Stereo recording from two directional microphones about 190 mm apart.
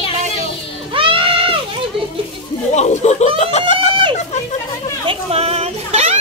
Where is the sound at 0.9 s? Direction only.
30° right (ahead or behind).